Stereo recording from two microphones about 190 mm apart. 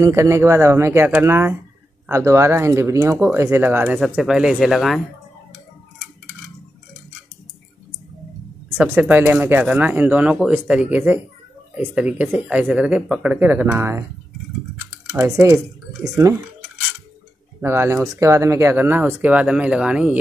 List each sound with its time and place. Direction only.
0.0 s speech: 15° right (ahead or behind)
8.6 s speech: 10° right (ahead or behind)
15.1 s speech: 15° right (ahead or behind)
17.6 s speech: 15° right (ahead or behind)